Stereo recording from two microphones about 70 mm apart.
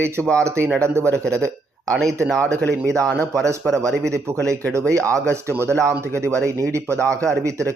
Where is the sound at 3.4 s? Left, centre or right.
Right.